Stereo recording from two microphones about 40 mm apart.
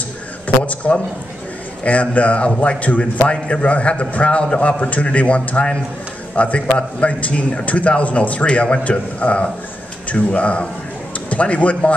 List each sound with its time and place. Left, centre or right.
0.8 s a man's voice: centre
1.9 s a man's voice: left
3.3 s a man's voice: left